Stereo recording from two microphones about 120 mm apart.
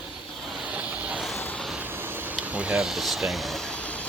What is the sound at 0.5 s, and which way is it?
Vehicle, 10° right (ahead or behind).